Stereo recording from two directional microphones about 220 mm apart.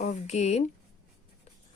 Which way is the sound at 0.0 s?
30° left (ahead or behind).